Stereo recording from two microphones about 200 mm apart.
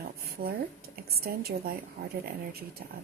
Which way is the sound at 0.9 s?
50° right (ahead or behind).